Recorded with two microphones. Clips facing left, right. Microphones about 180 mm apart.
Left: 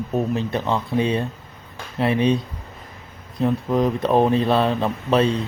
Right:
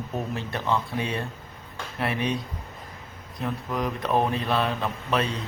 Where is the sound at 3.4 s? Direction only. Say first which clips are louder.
Left 9 dB; 30° left (ahead or behind).